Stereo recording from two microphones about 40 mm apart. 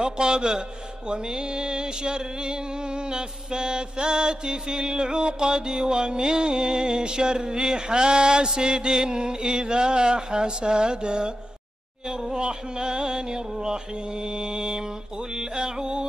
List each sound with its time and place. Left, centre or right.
0.0 s music: right